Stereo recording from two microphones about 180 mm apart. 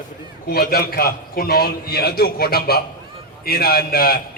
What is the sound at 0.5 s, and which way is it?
A man's voice, 55° left (ahead or behind).